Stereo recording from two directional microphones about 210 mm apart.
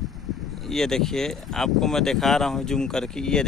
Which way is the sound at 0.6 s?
Centre (ahead or behind).